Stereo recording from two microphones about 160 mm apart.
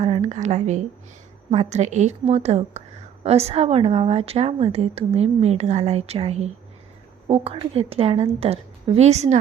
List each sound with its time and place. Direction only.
0.0 s a woman's voice: 45° right (ahead or behind)